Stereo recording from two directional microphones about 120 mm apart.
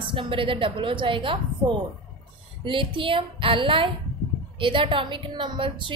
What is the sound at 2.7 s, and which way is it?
A woman's voice, 45° right (ahead or behind).